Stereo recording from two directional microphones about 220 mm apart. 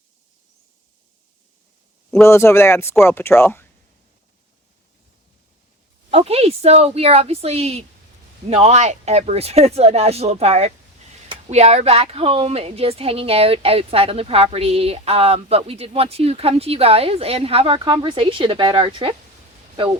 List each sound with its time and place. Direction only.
2.0 s speech: 5° left (ahead or behind)
6.1 s a woman's voice: 25° right (ahead or behind)